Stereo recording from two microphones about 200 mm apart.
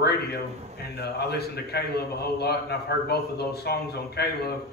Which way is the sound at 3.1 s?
50° left (ahead or behind).